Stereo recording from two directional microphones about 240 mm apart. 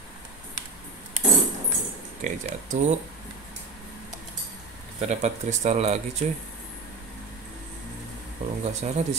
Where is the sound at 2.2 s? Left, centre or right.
Right.